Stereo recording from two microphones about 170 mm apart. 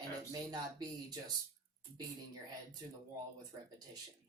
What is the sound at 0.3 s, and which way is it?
Speech, 25° right (ahead or behind).